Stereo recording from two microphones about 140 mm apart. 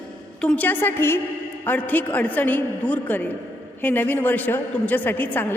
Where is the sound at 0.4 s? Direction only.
10° left (ahead or behind).